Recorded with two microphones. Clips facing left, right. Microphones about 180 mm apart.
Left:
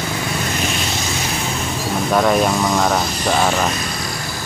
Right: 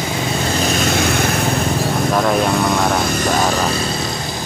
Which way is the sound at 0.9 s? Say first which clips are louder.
Right 7 dB; 60° right (ahead or behind).